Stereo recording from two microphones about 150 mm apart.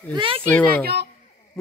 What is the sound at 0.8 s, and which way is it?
Speech, 90° right.